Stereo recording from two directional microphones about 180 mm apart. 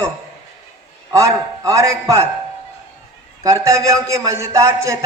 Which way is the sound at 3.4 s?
15° right (ahead or behind).